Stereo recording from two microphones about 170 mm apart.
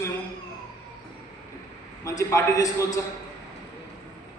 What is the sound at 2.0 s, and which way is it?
Speech, 20° left (ahead or behind).